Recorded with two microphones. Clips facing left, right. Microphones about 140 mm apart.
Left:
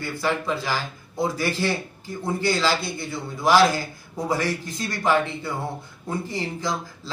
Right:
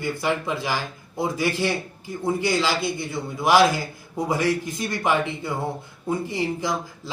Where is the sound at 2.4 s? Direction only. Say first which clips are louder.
Left 2 dB; 20° right (ahead or behind).